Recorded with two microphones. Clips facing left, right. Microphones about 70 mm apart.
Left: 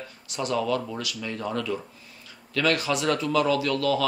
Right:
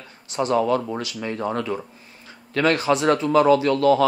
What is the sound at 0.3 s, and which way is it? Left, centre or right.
Speech, right.